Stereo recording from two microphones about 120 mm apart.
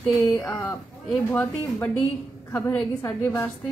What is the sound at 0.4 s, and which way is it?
Speech, 25° left (ahead or behind).